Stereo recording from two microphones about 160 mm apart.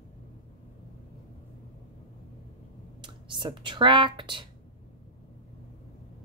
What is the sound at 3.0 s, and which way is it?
Speech, 30° right (ahead or behind).